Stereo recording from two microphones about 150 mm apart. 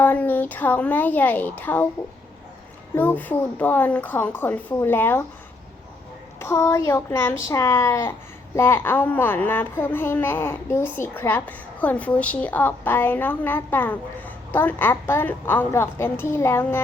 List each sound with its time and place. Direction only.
0.0 s a woman's voice: 10° left (ahead or behind)
2.9 s a child's voice: 15° left (ahead or behind)
6.4 s a child's voice: 20° left (ahead or behind)